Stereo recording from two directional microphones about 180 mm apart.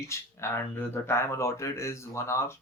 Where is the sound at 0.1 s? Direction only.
15° left (ahead or behind).